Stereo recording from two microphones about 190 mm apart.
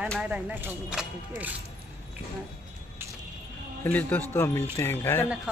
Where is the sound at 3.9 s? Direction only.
10° left (ahead or behind).